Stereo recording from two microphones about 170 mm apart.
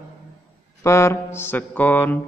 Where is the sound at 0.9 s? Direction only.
15° left (ahead or behind).